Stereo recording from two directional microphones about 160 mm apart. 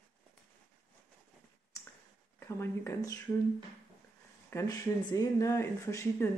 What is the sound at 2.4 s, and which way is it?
Speech, 15° left (ahead or behind).